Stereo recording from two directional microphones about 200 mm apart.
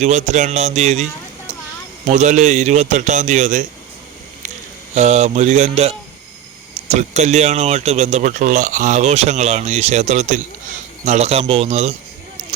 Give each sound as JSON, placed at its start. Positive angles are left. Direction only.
{"t": 0.0, "sound": "speech", "side_deg": -35}
{"t": 2.0, "sound": "speech", "side_deg": -35}
{"t": 4.9, "sound": "speech", "side_deg": -35}
{"t": 12.4, "sound": "a sound", "side_deg": -40}